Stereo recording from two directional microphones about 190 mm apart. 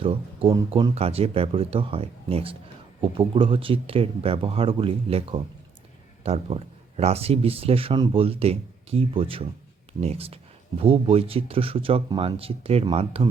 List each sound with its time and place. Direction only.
0.0 s speech: 30° right (ahead or behind)